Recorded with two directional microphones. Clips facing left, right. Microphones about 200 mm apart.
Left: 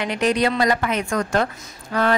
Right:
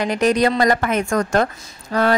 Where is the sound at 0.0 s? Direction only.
45° right (ahead or behind).